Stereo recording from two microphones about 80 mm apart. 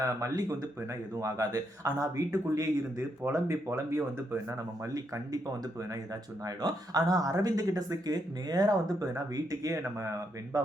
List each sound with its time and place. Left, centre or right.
0.0 s speech: right
3.3 s speech: right
6.4 s speech: right